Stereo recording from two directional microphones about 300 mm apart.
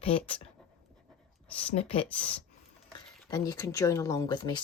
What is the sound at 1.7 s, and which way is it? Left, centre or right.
Speech, centre.